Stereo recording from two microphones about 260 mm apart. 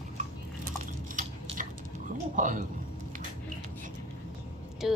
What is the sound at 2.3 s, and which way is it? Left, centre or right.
Speech, right.